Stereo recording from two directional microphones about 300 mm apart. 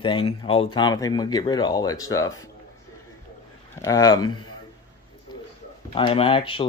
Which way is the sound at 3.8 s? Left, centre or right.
Centre.